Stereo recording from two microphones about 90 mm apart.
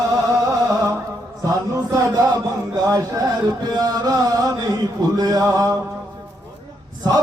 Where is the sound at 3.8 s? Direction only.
45° right (ahead or behind).